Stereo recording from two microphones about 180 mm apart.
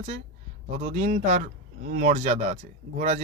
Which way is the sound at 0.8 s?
45° right (ahead or behind).